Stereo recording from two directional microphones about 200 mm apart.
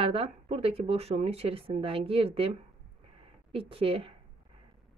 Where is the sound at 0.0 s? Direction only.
30° right (ahead or behind).